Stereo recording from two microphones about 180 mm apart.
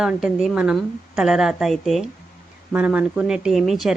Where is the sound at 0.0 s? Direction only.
5° right (ahead or behind).